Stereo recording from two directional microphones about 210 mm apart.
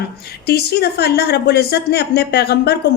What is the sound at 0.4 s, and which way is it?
A woman's voice, 50° left (ahead or behind).